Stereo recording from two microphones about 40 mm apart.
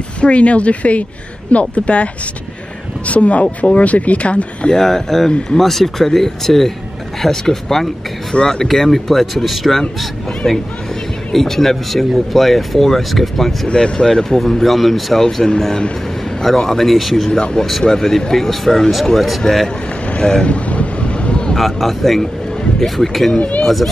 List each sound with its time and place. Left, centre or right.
0.2 s speech: left
3.1 s speech: left
4.7 s speech: centre
10.4 s speech: centre
11.3 s speech: centre
13.7 s speech: left
14.5 s speech: centre
15.2 s speech: centre
17.8 s speech: centre
20.1 s speech: left
20.4 s vehicle: left
21.5 s speech: centre